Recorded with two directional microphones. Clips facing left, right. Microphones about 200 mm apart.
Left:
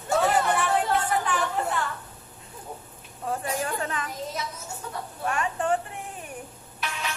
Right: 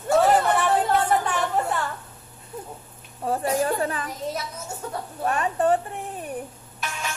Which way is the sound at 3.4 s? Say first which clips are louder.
Right 9 dB; 35° right (ahead or behind).